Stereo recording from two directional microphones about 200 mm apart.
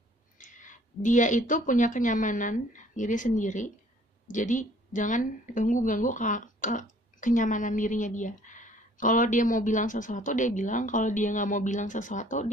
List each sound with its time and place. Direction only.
0.4 s a woman's voice: 40° left (ahead or behind)